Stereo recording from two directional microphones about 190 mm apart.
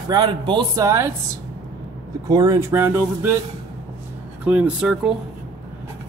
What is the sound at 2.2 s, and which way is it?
Speech, 20° right (ahead or behind).